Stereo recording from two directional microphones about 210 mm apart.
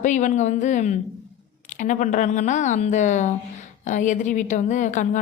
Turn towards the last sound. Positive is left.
turn(degrees=35)  # may be behind; listen again after turning